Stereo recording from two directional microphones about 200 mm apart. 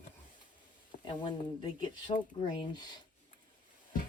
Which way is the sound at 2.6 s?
20° left (ahead or behind).